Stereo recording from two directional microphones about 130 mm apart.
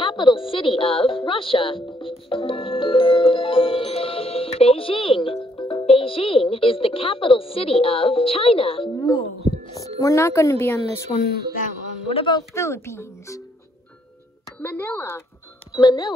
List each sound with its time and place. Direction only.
0.0 s a sound: 35° left (ahead or behind)
0.4 s music: 40° left (ahead or behind)
5.6 s speech: 40° left (ahead or behind)
8.9 s speech: 30° left (ahead or behind)
12.1 s speech: 45° left (ahead or behind)
12.4 s speech: 20° left (ahead or behind)
14.6 s speech: 15° left (ahead or behind)
15.7 s speech: 35° left (ahead or behind)